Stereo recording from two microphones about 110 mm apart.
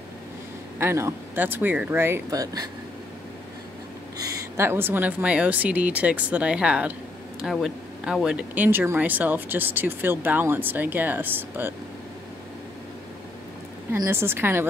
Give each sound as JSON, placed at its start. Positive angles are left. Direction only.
{"t": 0.7, "sound": "speech", "side_deg": -25}
{"t": 2.3, "sound": "speech", "side_deg": -35}
{"t": 4.2, "sound": "speech", "side_deg": -25}
{"t": 13.9, "sound": "speech", "side_deg": -25}